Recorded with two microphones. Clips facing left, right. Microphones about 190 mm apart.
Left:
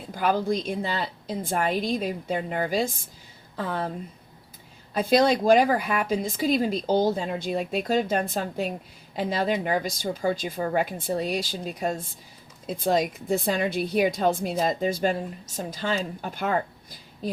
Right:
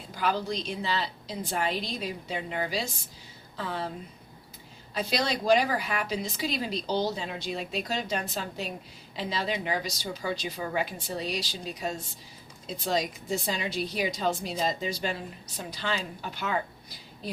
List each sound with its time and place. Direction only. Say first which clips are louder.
0.1 s a woman's voice: left 5 dB; 50° left (ahead or behind)
4.9 s a woman's voice: left 9 dB; 50° left (ahead or behind)